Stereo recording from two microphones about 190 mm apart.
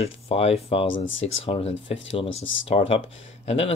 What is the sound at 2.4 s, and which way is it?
Speech, 85° left.